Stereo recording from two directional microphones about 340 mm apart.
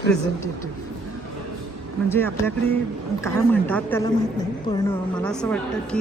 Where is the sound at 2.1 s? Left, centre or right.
Centre.